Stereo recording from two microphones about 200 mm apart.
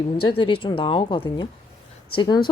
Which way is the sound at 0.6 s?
25° left (ahead or behind).